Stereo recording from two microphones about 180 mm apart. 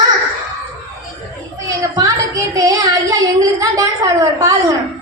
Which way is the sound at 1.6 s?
20° right (ahead or behind).